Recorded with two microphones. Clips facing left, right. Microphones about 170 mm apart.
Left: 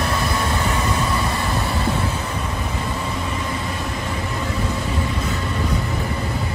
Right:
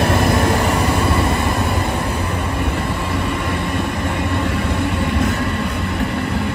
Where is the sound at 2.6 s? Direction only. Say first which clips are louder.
Right 4 dB; 70° right (ahead or behind).